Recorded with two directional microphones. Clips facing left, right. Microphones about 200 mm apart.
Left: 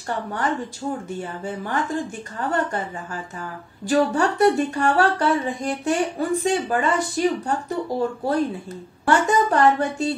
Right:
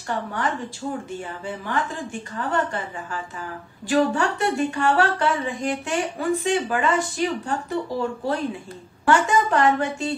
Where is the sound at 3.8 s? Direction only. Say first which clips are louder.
Left 1 dB; 40° left (ahead or behind).